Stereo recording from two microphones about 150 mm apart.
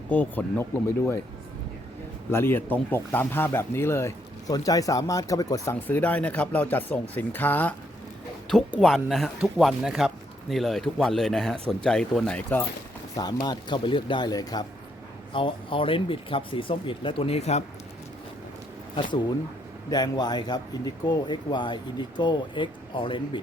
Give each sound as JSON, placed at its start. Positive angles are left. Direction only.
{"t": 0.1, "sound": "speech", "side_deg": 10}
{"t": 2.3, "sound": "speech", "side_deg": 15}
{"t": 8.8, "sound": "speech", "side_deg": 0}
{"t": 13.1, "sound": "speech", "side_deg": 30}
{"t": 19.9, "sound": "speech", "side_deg": 30}